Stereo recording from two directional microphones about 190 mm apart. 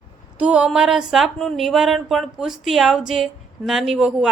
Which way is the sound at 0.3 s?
5° right (ahead or behind).